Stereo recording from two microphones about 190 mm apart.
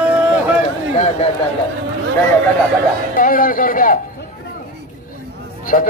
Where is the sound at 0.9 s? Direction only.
35° left (ahead or behind).